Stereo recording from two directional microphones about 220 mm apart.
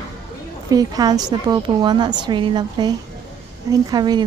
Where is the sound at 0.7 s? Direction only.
15° right (ahead or behind).